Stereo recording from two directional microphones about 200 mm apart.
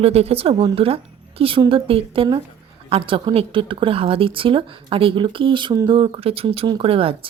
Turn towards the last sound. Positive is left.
turn(degrees=-25)  # may be behind; listen again after turning